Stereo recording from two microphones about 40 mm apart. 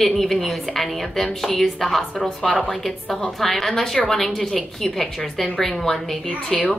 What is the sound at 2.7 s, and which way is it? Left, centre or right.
A woman's voice, centre.